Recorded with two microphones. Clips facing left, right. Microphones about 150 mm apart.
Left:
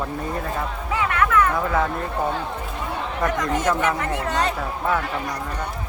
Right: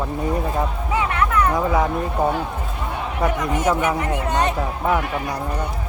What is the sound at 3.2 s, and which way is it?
Speech, 10° right (ahead or behind).